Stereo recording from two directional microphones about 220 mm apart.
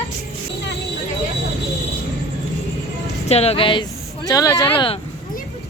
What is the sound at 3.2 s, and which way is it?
Speech, 30° left (ahead or behind).